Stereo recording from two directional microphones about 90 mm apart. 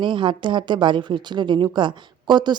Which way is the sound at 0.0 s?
65° right (ahead or behind).